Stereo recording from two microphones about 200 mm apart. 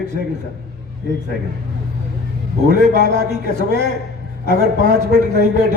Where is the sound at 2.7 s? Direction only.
50° left (ahead or behind).